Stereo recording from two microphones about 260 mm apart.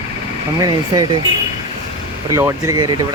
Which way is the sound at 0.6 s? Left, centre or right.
Centre.